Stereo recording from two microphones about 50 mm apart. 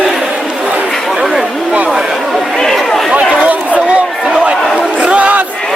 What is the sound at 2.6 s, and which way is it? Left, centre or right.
Chatter, centre.